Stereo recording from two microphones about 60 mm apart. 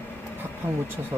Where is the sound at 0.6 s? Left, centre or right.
Right.